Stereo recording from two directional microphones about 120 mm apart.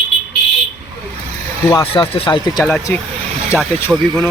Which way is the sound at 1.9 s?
50° left (ahead or behind).